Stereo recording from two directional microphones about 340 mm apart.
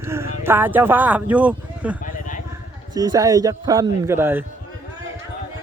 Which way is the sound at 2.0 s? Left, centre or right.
Left.